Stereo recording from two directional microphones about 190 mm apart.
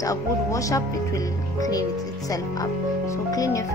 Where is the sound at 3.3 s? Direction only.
20° left (ahead or behind).